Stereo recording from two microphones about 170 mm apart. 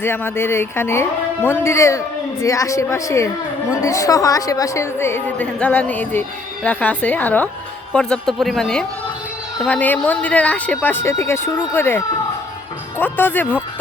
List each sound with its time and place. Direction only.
0.0 s a woman's voice: 15° left (ahead or behind)